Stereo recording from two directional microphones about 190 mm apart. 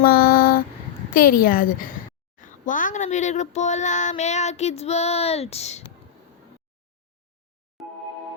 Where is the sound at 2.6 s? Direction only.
45° left (ahead or behind).